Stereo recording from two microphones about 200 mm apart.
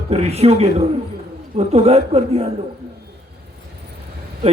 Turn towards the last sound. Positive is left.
turn(degrees=-30)  # may be behind; listen again after turning